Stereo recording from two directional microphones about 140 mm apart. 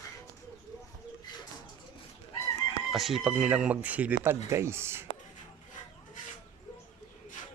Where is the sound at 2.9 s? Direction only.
Centre (ahead or behind); by 5.1 s 15° right (ahead or behind).